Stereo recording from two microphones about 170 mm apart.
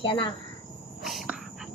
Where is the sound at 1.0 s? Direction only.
Centre (ahead or behind).